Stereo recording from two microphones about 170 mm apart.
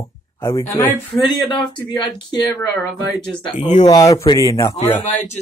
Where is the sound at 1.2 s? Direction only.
30° left (ahead or behind).